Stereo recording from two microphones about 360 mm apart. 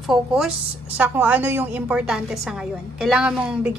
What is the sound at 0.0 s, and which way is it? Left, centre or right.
Speech, centre.